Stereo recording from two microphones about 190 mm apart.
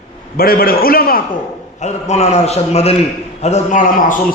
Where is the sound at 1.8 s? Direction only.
35° left (ahead or behind).